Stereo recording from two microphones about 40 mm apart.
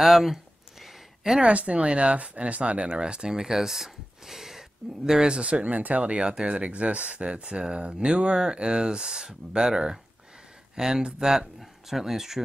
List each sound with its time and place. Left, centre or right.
0.0 s a sound: centre
1.4 s speech: right
5.7 s speech: right; by 12.4 s centre